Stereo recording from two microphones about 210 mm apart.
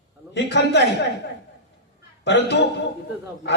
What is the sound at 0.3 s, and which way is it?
Speech, 55° left (ahead or behind).